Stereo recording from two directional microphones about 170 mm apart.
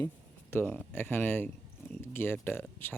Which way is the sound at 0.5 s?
15° left (ahead or behind).